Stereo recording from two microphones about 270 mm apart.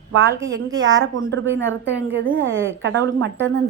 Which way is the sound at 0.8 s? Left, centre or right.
Right.